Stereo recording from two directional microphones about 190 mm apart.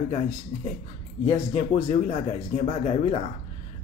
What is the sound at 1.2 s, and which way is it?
Speech, 30° left (ahead or behind).